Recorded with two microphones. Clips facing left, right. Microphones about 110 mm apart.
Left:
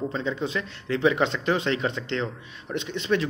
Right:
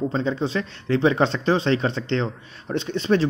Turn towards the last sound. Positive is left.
turn(degrees=-35)  # may be behind; listen again after turning